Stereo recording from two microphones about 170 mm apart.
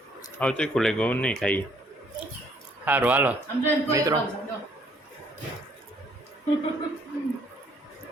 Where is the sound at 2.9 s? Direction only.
10° right (ahead or behind).